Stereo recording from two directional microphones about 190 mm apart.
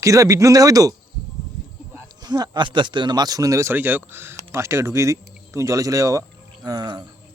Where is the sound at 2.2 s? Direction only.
20° right (ahead or behind).